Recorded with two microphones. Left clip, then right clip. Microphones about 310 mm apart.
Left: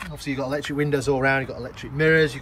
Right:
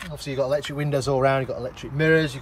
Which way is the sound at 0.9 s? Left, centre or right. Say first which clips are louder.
Right 1 dB; right.